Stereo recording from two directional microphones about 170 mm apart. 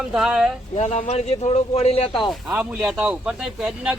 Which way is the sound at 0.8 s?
40° left (ahead or behind).